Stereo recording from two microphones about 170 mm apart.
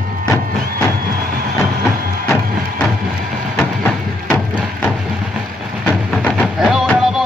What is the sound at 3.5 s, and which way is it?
Music, 10° left (ahead or behind).